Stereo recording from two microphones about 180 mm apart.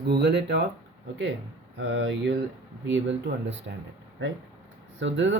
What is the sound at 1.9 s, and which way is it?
Speech, 90° right.